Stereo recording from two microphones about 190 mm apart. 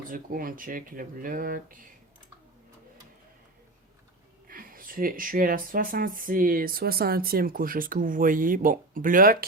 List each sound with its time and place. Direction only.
0.1 s speech: 45° right (ahead or behind)
4.4 s speech: 50° right (ahead or behind)